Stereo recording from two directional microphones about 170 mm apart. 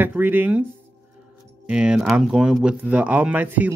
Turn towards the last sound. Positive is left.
turn(degrees=-10)  # may be behind; listen again after turning